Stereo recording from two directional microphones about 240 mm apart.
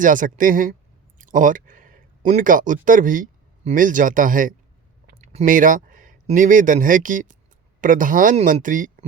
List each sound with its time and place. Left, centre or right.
0.0 s speech: right